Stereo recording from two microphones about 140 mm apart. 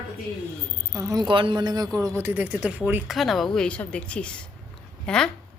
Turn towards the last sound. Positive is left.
turn(degrees=5)  # may be behind; listen again after turning